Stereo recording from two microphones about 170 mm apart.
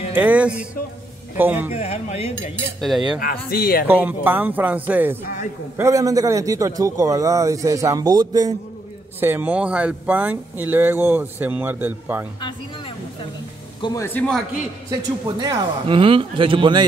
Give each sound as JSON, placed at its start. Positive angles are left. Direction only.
{"t": 0.1, "sound": "speech", "side_deg": -10}
{"t": 1.7, "sound": "speech", "side_deg": 40}
{"t": 3.2, "sound": "speech", "side_deg": 60}
{"t": 3.8, "sound": "a man's voice", "side_deg": -10}
{"t": 9.2, "sound": "speech", "side_deg": -10}
{"t": 12.4, "sound": "speech", "side_deg": 30}
{"t": 14.0, "sound": "a man's voice", "side_deg": 5}
{"t": 14.9, "sound": "a man's voice", "side_deg": -20}